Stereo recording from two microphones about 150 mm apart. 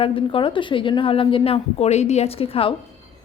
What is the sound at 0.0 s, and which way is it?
Speech, 35° left (ahead or behind).